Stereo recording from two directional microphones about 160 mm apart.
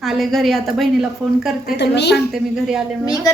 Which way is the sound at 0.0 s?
Centre (ahead or behind).